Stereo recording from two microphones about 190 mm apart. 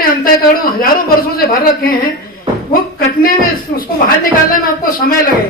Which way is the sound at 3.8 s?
50° left (ahead or behind).